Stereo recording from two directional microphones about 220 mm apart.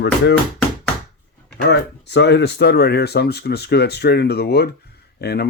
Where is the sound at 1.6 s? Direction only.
50° left (ahead or behind).